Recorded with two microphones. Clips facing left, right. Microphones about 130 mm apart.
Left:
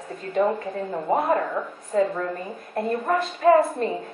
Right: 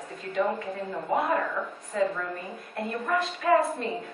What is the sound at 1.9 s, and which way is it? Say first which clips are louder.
A woman's voice: left 5 dB; 40° left (ahead or behind).